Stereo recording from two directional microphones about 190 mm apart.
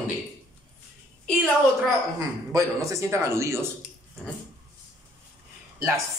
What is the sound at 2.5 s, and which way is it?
A man's voice, 15° right (ahead or behind).